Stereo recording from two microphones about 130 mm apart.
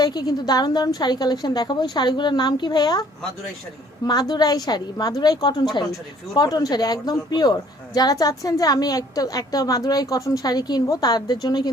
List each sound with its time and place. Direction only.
0.0 s a woman's voice: 30° left (ahead or behind)